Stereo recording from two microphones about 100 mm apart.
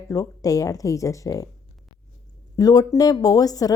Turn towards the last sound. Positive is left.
turn(degrees=40)  # may be behind; listen again after turning